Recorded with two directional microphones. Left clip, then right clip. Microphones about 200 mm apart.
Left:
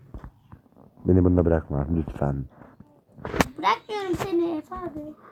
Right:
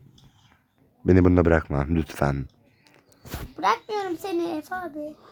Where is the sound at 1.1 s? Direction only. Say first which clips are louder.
Right 2 dB; 35° right (ahead or behind).